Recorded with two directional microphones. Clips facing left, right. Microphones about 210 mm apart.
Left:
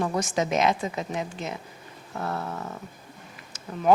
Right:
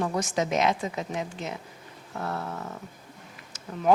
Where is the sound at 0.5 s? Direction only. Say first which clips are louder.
Left 2 dB; 15° left (ahead or behind).